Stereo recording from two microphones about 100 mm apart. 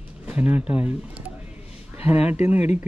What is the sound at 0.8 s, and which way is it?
Speech, 15° right (ahead or behind).